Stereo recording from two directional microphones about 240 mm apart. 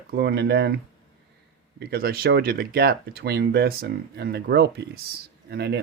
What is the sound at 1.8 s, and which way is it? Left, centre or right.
Speech, right.